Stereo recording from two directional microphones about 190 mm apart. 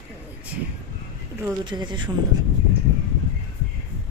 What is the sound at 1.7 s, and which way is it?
Speech, 25° right (ahead or behind).